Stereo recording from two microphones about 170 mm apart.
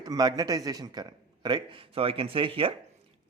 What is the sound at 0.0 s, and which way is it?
A man's voice, 20° right (ahead or behind).